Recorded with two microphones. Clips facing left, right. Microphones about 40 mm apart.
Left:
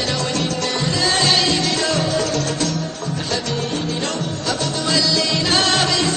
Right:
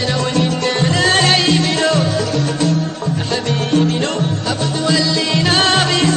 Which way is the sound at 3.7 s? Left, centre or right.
Right.